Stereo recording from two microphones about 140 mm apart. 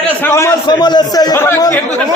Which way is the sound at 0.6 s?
30° left (ahead or behind).